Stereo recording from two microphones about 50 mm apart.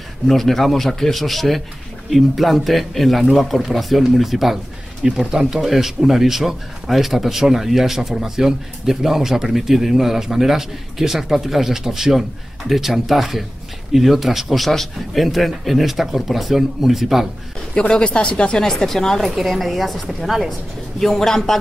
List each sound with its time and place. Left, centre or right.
0.3 s speech: centre
5.0 s speech: centre
17.7 s speech: centre